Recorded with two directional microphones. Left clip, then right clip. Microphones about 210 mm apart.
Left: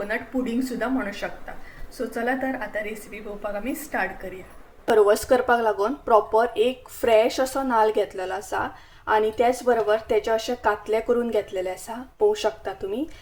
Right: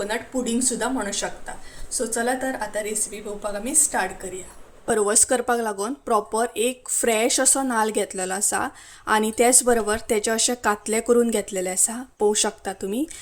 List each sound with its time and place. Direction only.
0.1 s a woman's voice: 10° right (ahead or behind)
4.9 s speech: 35° right (ahead or behind)